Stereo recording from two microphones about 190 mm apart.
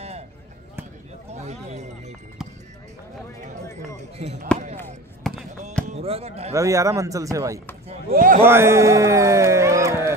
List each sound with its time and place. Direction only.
1.3 s music: 35° right (ahead or behind)
4.5 s basketball bounce: 5° left (ahead or behind)
5.2 s fireworks: centre (ahead or behind)
5.9 s speech: 30° right (ahead or behind)
6.5 s speech: 15° right (ahead or behind)
8.1 s a man's voice: 50° right (ahead or behind)
8.5 s a man's voice: 15° right (ahead or behind)